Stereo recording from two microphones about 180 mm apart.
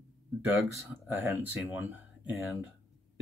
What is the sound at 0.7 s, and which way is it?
Speech, 15° right (ahead or behind).